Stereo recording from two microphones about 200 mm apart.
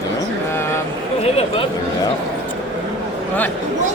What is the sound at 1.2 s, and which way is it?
Chatter, 30° left (ahead or behind).